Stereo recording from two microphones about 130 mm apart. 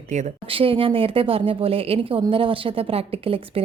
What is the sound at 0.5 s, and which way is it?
A woman's voice, 45° right (ahead or behind).